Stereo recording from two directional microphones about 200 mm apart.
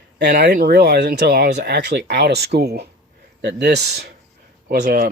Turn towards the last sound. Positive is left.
turn(degrees=-50)  # may be behind; listen again after turning